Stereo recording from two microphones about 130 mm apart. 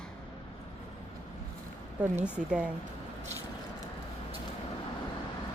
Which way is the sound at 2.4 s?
10° right (ahead or behind).